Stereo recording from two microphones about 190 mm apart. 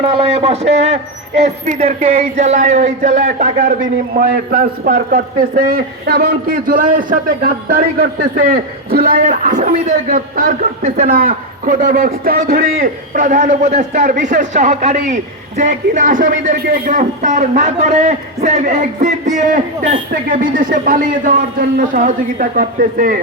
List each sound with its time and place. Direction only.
0.2 s a man's voice: 30° right (ahead or behind); by 23.2 s 45° right (ahead or behind)